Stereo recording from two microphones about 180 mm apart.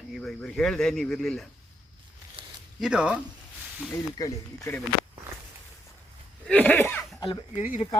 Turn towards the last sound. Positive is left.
turn(degrees=40)  # may be behind; listen again after turning